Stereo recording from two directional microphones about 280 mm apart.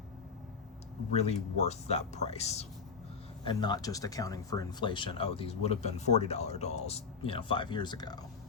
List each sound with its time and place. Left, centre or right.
1.1 s speech: left